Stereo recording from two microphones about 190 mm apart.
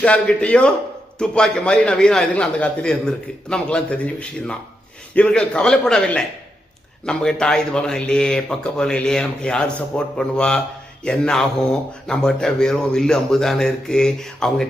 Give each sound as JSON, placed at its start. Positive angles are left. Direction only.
{"t": 0.0, "sound": "speech", "side_deg": 5}